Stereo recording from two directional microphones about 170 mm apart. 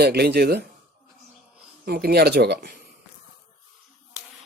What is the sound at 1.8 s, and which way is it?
Speech, 65° right (ahead or behind).